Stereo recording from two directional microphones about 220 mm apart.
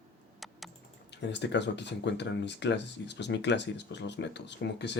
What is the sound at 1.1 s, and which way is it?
Speech, 50° left (ahead or behind).